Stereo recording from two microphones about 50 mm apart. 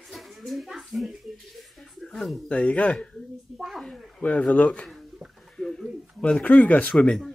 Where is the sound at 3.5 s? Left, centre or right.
Centre.